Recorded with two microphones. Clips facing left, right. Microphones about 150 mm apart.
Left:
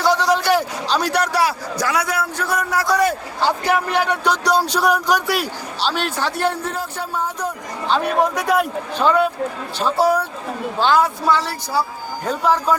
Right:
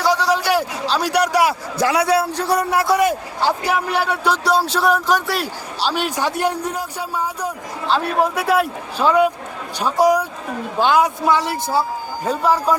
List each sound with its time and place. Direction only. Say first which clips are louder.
0.0 s a man's voice: left 1 dB; 10° right (ahead or behind); by 3.1 s 25° right (ahead or behind)
3.1 s a man's voice: right 1 dB; 10° right (ahead or behind)
12.2 s a man's voice: right 1 dB; 5° right (ahead or behind)